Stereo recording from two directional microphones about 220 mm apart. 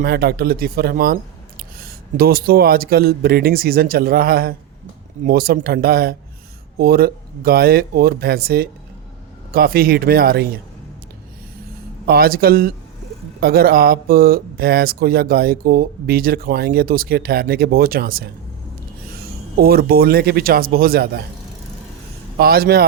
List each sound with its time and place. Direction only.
0.0 s speech: 45° right (ahead or behind)
12.0 s speech: 45° right (ahead or behind)
19.6 s speech: 45° right (ahead or behind)
22.4 s speech: 45° right (ahead or behind)